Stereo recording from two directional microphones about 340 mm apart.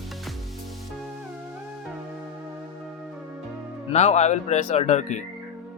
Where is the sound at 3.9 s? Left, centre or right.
Centre.